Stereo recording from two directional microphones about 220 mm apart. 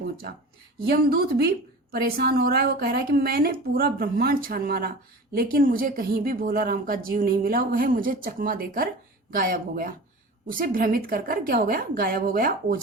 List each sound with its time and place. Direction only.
0.9 s a woman's voice: 45° right (ahead or behind)